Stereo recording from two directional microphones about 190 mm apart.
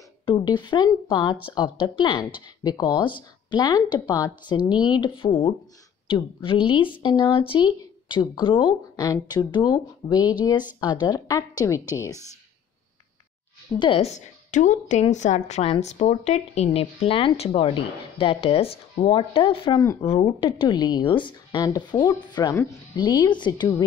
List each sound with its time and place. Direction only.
0.2 s speech: 25° left (ahead or behind)
13.7 s a woman's voice: 25° left (ahead or behind)
20.0 s speech: 30° left (ahead or behind)